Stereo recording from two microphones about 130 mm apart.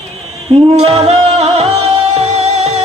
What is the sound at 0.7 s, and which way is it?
Music, 55° right (ahead or behind).